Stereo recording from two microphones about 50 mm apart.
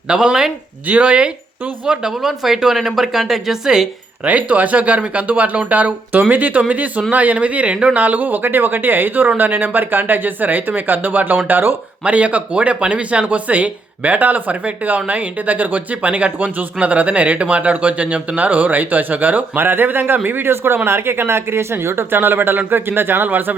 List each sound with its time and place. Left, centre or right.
0.1 s speech: centre
0.9 s speech: right
1.9 s speech: centre
4.2 s speech: right
12.0 s speech: right